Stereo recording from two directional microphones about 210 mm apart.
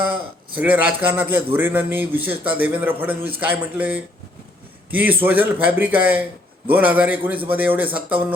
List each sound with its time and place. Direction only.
0.1 s a man's voice: 5° right (ahead or behind)